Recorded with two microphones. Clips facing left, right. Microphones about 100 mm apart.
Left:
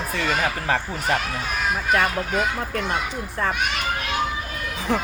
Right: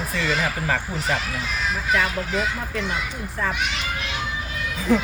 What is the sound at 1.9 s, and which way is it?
Speech, 50° left (ahead or behind).